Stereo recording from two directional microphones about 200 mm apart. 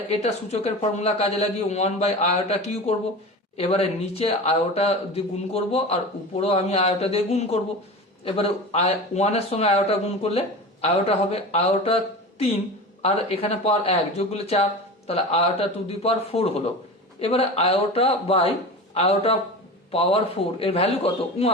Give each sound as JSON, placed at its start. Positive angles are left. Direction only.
{"t": 0.1, "sound": "speech", "side_deg": 30}
{"t": 13.0, "sound": "a man's voice", "side_deg": 30}